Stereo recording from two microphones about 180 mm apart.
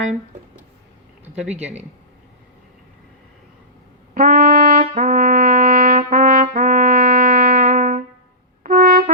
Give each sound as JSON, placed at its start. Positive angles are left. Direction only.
{"t": 4.1, "sound": "brass instrument", "side_deg": -50}
{"t": 8.6, "sound": "trumpet", "side_deg": -50}